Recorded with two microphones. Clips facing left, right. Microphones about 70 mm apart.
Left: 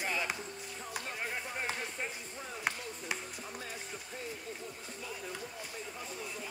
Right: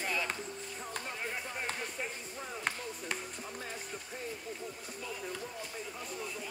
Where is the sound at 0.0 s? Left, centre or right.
Centre.